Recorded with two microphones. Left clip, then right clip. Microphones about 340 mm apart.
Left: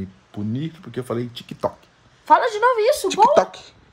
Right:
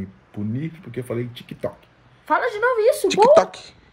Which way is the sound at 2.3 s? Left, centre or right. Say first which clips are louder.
Left 4 dB; left.